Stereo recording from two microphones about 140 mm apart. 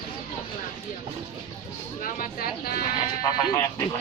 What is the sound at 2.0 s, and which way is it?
Speech, 90° left.